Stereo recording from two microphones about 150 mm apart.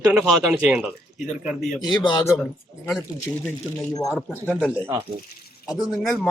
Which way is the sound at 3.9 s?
25° left (ahead or behind).